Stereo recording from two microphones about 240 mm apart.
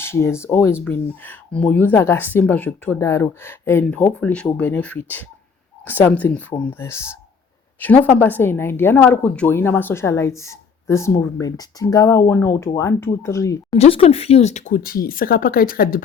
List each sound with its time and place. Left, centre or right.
0.0 s speech: centre
13.7 s speech: left